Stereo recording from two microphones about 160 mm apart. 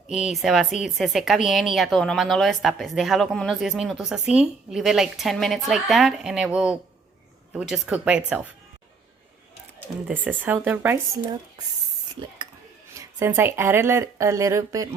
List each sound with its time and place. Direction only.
0.3 s speech: centre (ahead or behind)
10.1 s speech: 10° right (ahead or behind)
12.9 s speech: 15° right (ahead or behind)